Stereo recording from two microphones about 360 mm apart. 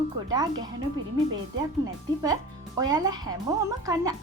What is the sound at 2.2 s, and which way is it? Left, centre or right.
Music, centre.